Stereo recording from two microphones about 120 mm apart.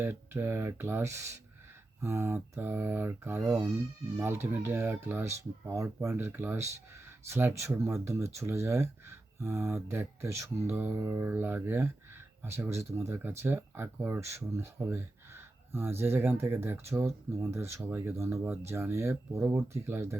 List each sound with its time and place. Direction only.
0.0 s speech: 20° right (ahead or behind)
11.3 s speech: 15° right (ahead or behind)